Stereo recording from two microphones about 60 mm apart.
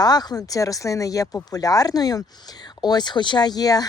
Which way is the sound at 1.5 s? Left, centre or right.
Left.